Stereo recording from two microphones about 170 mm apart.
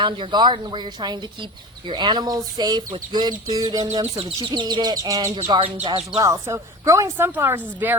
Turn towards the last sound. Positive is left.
turn(degrees=-10)  # may be behind; listen again after turning